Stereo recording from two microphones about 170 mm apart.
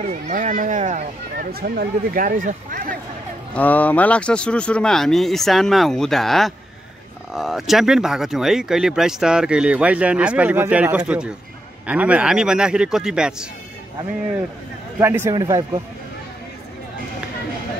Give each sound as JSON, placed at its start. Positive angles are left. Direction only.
{"t": 0.0, "sound": "speech", "side_deg": -45}
{"t": 1.3, "sound": "speech", "side_deg": -65}
{"t": 3.5, "sound": "speech", "side_deg": 10}
{"t": 15.0, "sound": "a man's voice", "side_deg": -15}